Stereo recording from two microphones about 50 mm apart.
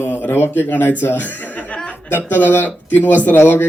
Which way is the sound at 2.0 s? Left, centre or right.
Left.